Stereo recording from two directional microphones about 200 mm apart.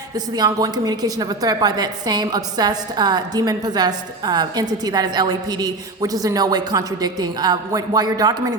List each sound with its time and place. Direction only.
0.3 s a woman's voice: 20° right (ahead or behind)